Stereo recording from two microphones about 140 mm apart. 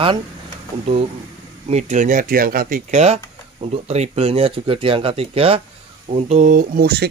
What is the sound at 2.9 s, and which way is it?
Speech, 50° right (ahead or behind).